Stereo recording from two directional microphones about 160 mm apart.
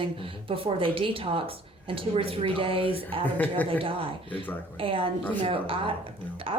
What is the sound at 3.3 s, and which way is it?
Speech, 10° left (ahead or behind).